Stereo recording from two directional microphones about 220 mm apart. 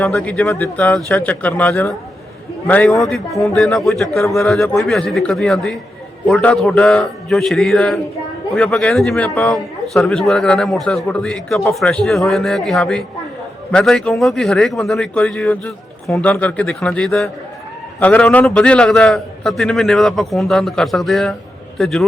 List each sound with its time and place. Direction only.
0.0 s a man's voice: 10° left (ahead or behind)